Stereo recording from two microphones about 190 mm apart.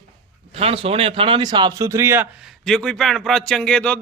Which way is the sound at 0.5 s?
30° right (ahead or behind).